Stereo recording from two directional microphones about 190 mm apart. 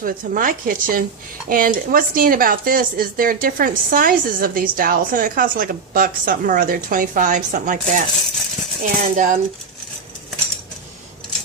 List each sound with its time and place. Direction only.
0.0 s speech: 45° right (ahead or behind)